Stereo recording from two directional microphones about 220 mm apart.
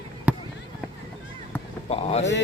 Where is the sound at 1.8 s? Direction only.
30° left (ahead or behind).